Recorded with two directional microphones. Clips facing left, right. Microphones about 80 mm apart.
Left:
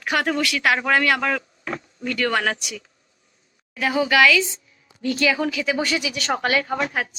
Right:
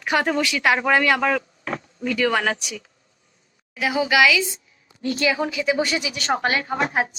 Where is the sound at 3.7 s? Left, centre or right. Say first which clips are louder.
Even; centre.